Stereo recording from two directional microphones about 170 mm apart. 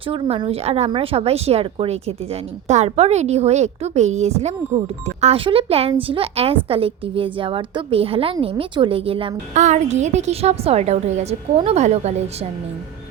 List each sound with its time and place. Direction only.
0.1 s a woman's voice: 30° right (ahead or behind)
9.6 s a woman's voice: 45° right (ahead or behind)